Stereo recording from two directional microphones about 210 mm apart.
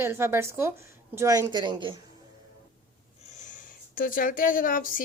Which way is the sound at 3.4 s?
40° left (ahead or behind).